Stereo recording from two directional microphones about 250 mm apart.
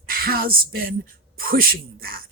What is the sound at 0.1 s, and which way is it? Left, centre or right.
Speech, right.